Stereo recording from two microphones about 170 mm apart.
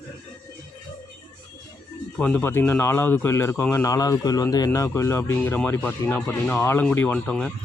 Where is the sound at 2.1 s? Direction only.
5° left (ahead or behind).